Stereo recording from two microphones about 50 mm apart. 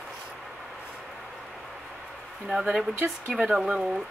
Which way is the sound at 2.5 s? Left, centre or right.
Centre.